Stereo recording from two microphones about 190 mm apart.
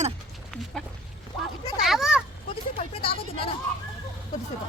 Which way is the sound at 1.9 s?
Centre (ahead or behind).